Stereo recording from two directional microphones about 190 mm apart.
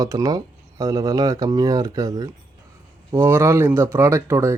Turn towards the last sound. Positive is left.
turn(degrees=-15)  # may be behind; listen again after turning